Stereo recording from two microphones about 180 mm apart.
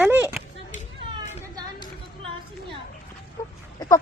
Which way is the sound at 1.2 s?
40° left (ahead or behind).